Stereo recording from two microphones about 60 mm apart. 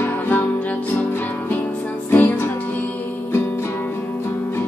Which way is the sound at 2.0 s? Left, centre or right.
Left.